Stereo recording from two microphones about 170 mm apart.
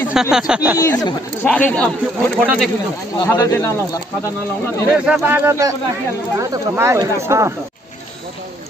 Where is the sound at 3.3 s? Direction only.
15° left (ahead or behind).